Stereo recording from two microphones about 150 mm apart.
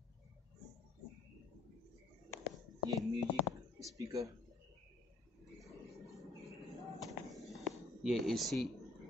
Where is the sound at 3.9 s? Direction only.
20° right (ahead or behind).